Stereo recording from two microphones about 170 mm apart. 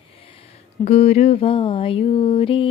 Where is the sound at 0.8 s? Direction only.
40° left (ahead or behind).